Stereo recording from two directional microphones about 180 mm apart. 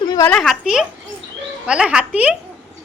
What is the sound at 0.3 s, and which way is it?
A woman's voice, centre (ahead or behind).